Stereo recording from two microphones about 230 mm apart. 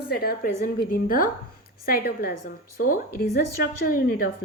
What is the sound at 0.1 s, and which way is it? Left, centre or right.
A woman's voice, left.